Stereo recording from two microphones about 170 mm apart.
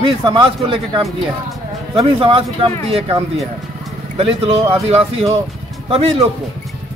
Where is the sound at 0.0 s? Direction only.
30° right (ahead or behind).